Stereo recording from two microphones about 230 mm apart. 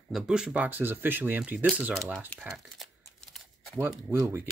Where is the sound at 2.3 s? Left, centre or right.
Centre.